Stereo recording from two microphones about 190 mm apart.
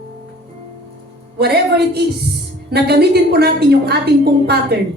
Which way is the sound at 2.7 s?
60° right (ahead or behind).